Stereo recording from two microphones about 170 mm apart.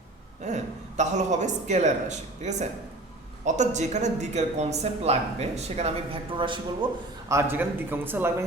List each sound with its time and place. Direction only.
0.4 s speech: 45° right (ahead or behind)
6.3 s speech: 30° right (ahead or behind)
7.3 s speech: 15° right (ahead or behind)